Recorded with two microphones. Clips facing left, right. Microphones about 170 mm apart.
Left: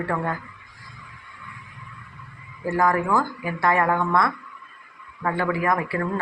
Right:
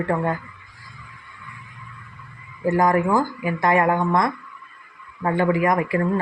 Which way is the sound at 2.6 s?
20° right (ahead or behind).